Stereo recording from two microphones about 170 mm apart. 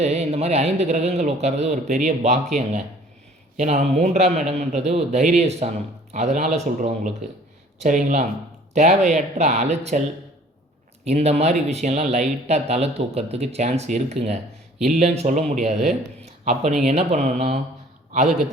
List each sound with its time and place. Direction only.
0.0 s speech: 40° right (ahead or behind)
7.8 s speech: 45° right (ahead or behind)
11.0 s speech: 40° right (ahead or behind)